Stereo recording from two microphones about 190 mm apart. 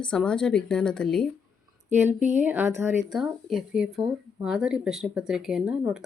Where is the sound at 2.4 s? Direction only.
10° right (ahead or behind).